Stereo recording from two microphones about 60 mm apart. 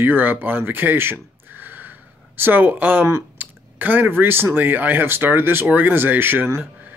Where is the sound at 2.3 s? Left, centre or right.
Right.